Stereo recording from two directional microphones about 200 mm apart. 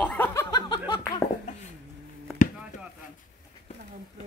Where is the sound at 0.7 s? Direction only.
20° left (ahead or behind).